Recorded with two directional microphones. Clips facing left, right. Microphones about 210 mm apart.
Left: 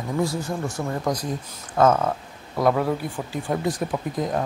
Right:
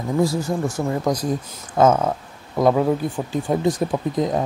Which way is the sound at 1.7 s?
20° right (ahead or behind).